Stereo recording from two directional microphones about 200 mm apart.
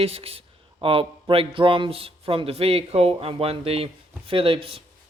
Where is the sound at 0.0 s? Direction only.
30° right (ahead or behind).